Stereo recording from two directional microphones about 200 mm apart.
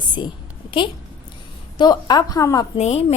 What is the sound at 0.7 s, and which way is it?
A woman's voice, 25° left (ahead or behind).